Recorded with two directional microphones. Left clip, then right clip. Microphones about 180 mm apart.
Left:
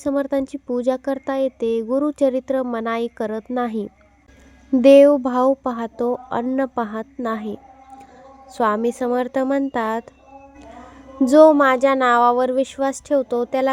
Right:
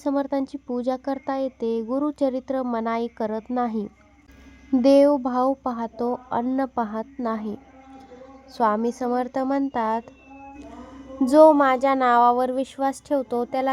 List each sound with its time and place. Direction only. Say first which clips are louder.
0.0 s a woman's voice: left 4 dB; 20° left (ahead or behind)
11.3 s a woman's voice: left 3 dB; 15° left (ahead or behind)